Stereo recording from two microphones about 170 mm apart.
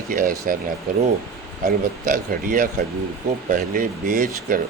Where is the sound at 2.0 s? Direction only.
50° right (ahead or behind).